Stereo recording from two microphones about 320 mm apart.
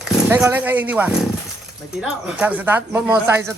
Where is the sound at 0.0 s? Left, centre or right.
Centre.